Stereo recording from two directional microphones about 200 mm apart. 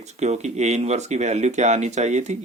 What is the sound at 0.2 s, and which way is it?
Speech, 35° right (ahead or behind).